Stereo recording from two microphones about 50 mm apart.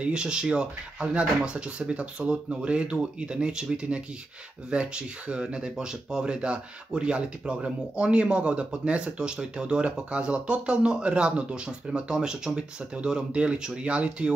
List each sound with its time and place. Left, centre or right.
0.0 s speech: centre